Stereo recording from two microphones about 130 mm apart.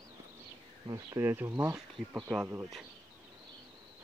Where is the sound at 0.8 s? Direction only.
25° right (ahead or behind).